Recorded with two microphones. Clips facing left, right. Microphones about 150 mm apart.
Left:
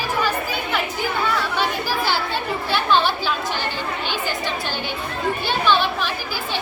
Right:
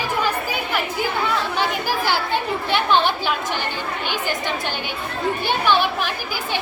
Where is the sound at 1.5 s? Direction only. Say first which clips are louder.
Even; 15° right (ahead or behind).